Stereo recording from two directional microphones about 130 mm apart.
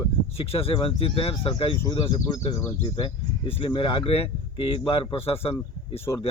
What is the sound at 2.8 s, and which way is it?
Speech, 45° left (ahead or behind).